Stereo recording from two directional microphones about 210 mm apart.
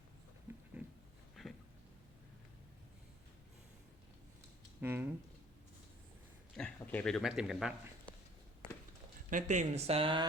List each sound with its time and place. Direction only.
0.4 s dog: 5° right (ahead or behind)
1.4 s a sound: centre (ahead or behind)
4.8 s speech: 10° right (ahead or behind)
6.6 s a man's voice: 10° left (ahead or behind)
9.3 s speech: 35° right (ahead or behind)